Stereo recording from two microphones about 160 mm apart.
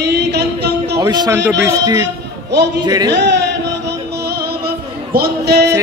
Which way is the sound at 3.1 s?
90° right.